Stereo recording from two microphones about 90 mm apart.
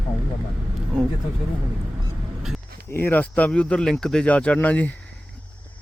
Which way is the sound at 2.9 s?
20° left (ahead or behind).